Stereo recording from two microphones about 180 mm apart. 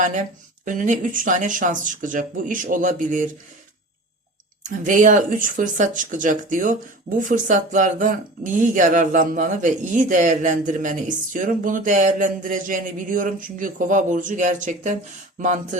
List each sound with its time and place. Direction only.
0.0 s speech: 45° right (ahead or behind)
4.6 s speech: 45° right (ahead or behind)